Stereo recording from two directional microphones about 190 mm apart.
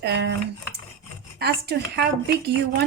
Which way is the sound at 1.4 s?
55° right (ahead or behind).